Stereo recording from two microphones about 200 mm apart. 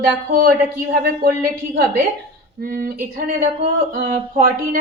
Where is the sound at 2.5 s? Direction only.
50° right (ahead or behind).